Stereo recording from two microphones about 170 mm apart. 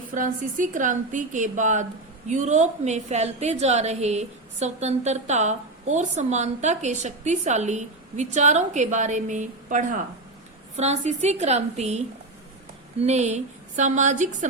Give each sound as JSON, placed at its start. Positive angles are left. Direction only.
{"t": 0.1, "sound": "a woman's voice", "side_deg": -50}